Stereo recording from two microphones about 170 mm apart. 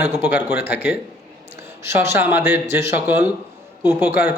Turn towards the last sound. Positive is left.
turn(degrees=-10)  # may be behind; listen again after turning